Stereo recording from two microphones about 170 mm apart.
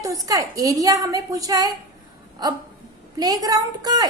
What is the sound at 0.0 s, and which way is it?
A woman's voice, 20° right (ahead or behind).